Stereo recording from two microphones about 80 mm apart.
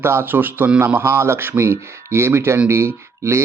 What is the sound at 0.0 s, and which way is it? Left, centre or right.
Speech, right.